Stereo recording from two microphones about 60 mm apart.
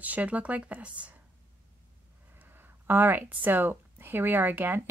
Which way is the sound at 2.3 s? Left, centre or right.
Right.